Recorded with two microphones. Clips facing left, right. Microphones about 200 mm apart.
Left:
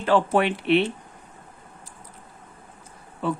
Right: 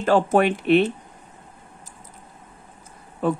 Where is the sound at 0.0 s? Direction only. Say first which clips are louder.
Right 2 dB; 45° right (ahead or behind).